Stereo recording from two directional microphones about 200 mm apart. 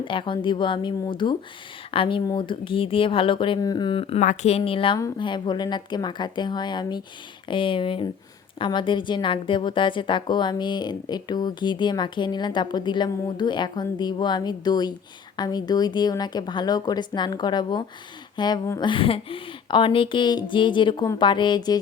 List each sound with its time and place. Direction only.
0.0 s a woman's voice: 25° left (ahead or behind)